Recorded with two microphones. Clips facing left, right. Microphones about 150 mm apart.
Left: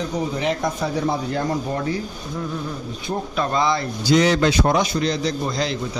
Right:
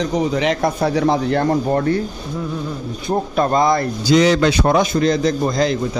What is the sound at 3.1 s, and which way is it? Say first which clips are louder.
Speech: right 6 dB; 45° right (ahead or behind).